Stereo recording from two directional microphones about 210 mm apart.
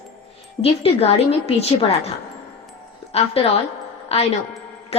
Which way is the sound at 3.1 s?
30° left (ahead or behind).